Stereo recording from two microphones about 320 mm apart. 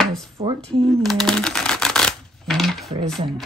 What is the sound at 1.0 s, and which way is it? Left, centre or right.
Typewriter, centre.